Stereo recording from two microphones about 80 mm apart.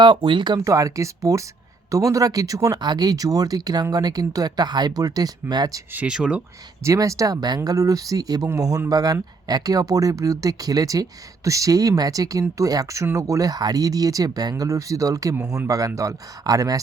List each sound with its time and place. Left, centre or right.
0.0 s speech: right
0.6 s speech: right
2.7 s speech: right
5.9 s speech: centre
6.8 s speech: right
14.5 s speech: right